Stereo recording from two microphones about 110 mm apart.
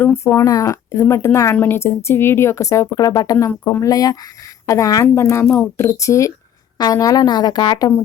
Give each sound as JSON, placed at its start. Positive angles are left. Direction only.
{"t": 0.4, "sound": "speech", "side_deg": 30}
{"t": 3.6, "sound": "speech", "side_deg": 20}
{"t": 3.8, "sound": "a woman's voice", "side_deg": 35}